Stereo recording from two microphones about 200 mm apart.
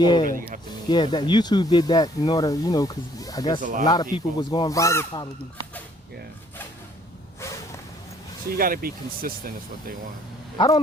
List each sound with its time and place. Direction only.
0.0 s speech: 20° left (ahead or behind)
3.6 s speech: 40° right (ahead or behind)
3.8 s speech: 20° left (ahead or behind)
8.5 s speech: 45° right (ahead or behind)